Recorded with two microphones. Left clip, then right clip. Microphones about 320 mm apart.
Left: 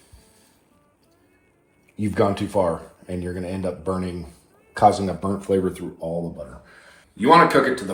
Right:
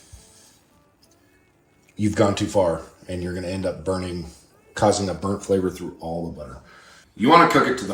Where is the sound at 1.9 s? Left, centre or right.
Centre.